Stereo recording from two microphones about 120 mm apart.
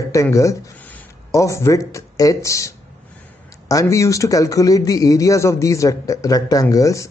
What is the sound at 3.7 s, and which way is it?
A man's voice, 25° left (ahead or behind).